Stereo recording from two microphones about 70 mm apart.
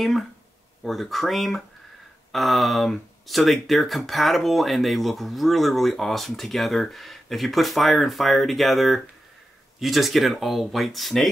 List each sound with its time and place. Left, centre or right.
0.8 s speech: centre